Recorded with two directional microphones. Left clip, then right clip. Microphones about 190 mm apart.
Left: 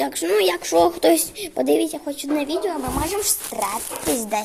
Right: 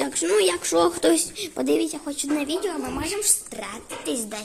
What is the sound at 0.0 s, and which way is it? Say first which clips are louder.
Speech: left 2 dB; 20° right (ahead or behind).